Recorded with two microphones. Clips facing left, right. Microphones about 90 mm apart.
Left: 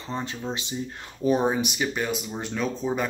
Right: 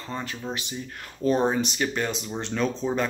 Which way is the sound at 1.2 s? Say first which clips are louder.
Even; 10° left (ahead or behind).